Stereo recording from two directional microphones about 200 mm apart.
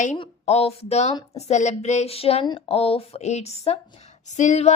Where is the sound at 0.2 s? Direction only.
30° left (ahead or behind).